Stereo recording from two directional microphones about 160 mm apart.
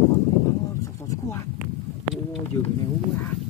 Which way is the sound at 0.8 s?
20° left (ahead or behind).